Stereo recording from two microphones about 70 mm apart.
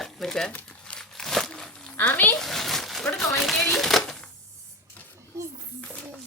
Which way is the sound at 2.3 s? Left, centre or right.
Centre.